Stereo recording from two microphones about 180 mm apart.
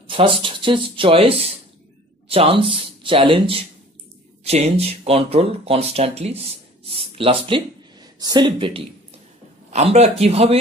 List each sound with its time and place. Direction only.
0.0 s speech: 30° right (ahead or behind)